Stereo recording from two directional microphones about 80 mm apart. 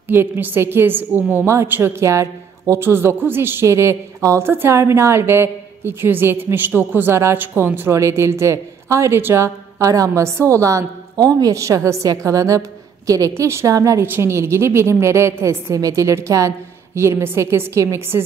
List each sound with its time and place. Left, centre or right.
0.1 s a woman's voice: right
7.9 s a woman's voice: right
13.3 s a woman's voice: right
14.0 s a woman's voice: right